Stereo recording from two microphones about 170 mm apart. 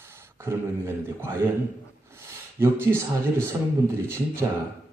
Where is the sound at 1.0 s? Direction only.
15° right (ahead or behind).